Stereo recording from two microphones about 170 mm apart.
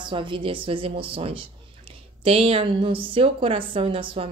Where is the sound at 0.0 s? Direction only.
30° right (ahead or behind).